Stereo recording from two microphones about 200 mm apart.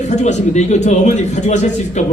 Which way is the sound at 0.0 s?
35° left (ahead or behind).